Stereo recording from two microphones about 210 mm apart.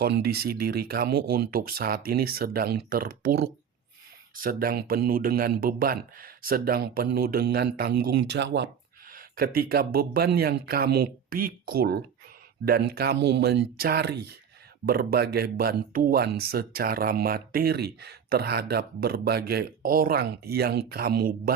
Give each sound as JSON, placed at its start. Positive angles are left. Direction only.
{"t": 0.0, "sound": "speech", "side_deg": -50}
{"t": 9.1, "sound": "speech", "side_deg": -45}